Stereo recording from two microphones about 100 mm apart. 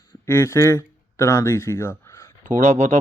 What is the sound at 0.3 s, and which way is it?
Speech, 25° left (ahead or behind).